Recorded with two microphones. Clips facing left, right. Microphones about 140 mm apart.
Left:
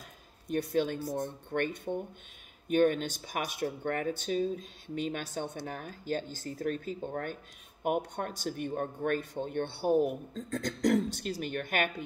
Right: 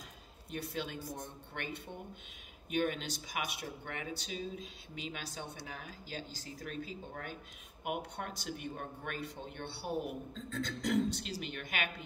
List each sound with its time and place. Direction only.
0.5 s speech: 50° left (ahead or behind)